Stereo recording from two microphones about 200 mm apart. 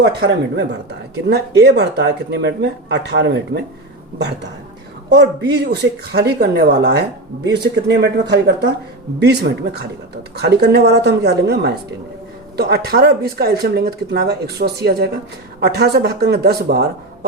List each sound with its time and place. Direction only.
0.2 s speech: 50° right (ahead or behind)
5.0 s speech: 60° right (ahead or behind)